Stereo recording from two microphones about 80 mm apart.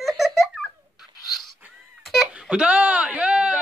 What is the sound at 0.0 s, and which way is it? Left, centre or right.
Babbling, centre.